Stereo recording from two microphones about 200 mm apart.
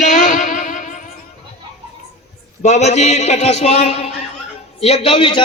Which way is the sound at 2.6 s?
35° left (ahead or behind).